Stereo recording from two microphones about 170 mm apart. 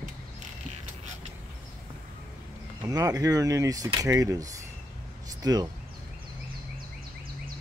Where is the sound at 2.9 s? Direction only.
20° right (ahead or behind).